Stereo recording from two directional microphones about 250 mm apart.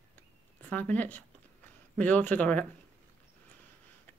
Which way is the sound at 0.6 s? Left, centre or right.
Centre.